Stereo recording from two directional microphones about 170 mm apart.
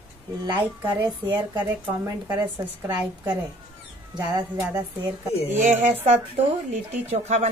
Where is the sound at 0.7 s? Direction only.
10° right (ahead or behind).